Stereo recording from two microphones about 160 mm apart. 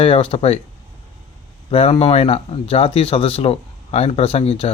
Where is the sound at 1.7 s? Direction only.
35° left (ahead or behind).